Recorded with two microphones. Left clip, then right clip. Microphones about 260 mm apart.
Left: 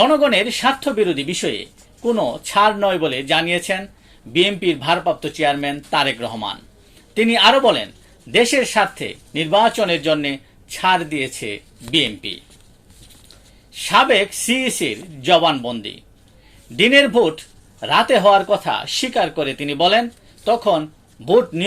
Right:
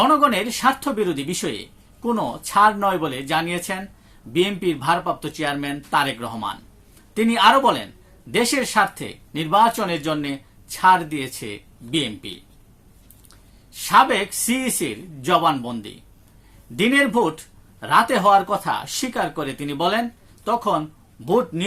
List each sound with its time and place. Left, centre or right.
0.0 s speech: centre
14.4 s speech: centre